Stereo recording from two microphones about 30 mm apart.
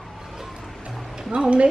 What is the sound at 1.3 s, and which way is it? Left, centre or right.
Speech, right.